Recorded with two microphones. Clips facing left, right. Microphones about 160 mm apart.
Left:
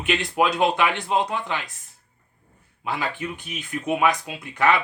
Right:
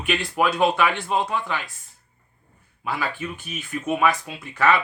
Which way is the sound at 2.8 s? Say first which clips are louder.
Even; 20° left (ahead or behind).